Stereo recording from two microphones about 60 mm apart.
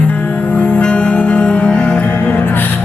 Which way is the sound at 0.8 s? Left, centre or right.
Centre.